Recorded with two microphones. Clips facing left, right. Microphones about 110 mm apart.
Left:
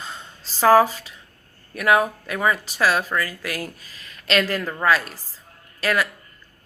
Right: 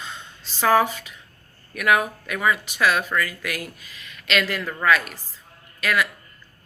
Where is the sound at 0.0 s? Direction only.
35° left (ahead or behind).